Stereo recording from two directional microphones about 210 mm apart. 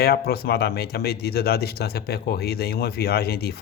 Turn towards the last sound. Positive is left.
turn(degrees=50)  # may be behind; listen again after turning